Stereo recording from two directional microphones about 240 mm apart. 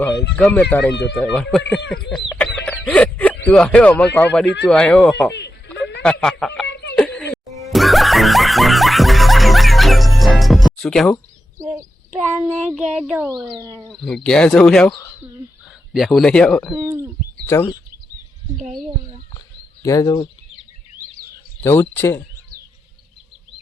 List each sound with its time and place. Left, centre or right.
0.3 s speech: centre
2.8 s music: centre
3.4 s speech: centre
6.7 s a sound: left
6.9 s music: centre
11.6 s speech: centre
13.6 s speech: centre
13.9 s speech: centre
16.8 s speech: centre
17.4 s speech: centre
19.8 s speech: centre
21.6 s speech: centre